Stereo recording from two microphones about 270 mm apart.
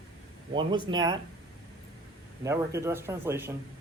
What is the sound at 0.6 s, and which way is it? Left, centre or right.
Speech, centre.